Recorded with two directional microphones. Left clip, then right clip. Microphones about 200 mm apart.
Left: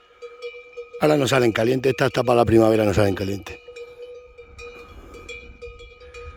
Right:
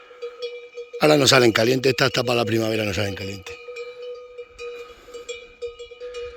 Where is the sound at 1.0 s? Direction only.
15° left (ahead or behind); by 3.6 s 45° left (ahead or behind).